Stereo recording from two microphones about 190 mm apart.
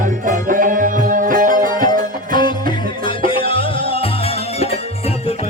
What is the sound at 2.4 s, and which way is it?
Music, 25° left (ahead or behind).